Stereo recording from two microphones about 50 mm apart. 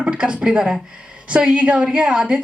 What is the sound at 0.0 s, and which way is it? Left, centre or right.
Speech, centre.